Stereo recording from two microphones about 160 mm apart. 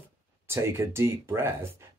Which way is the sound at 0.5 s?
15° right (ahead or behind).